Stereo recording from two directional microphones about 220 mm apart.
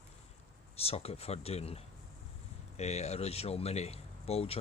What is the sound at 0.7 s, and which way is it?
Speech, 25° left (ahead or behind).